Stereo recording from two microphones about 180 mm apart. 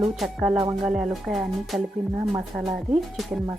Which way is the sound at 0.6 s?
25° right (ahead or behind).